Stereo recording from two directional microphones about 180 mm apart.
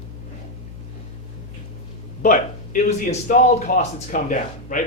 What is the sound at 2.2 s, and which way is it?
Speech, 45° left (ahead or behind).